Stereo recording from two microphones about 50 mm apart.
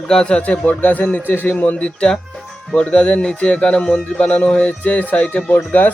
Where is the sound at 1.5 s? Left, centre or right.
Left; by 4.3 s centre.